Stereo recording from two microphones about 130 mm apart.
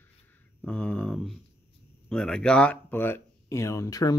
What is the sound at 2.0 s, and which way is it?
Speech, 5° left (ahead or behind).